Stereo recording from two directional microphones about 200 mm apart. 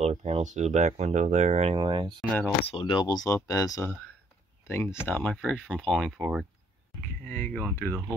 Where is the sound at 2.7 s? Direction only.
25° left (ahead or behind); by 6.5 s 5° right (ahead or behind).